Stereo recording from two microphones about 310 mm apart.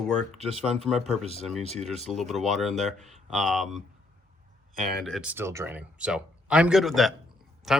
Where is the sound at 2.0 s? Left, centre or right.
Centre.